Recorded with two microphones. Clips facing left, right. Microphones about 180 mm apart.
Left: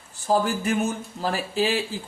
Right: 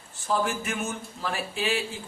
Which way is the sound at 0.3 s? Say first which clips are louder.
Left 5 dB; 35° left (ahead or behind).